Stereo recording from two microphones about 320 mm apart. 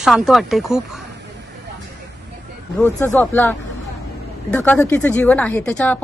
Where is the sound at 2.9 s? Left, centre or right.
Centre.